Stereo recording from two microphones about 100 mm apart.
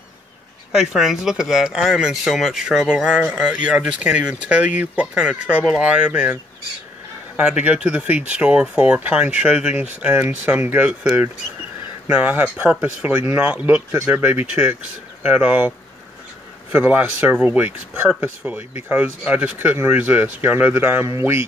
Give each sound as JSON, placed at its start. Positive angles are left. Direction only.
{"t": 0.7, "sound": "speech", "side_deg": -5}
{"t": 7.3, "sound": "speech", "side_deg": -15}
{"t": 16.7, "sound": "speech", "side_deg": -20}